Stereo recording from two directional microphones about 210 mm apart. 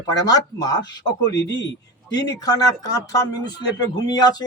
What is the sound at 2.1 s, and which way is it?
Speech, 15° left (ahead or behind).